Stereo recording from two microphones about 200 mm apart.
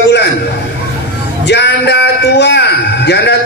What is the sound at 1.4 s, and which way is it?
A man's voice, 60° left (ahead or behind).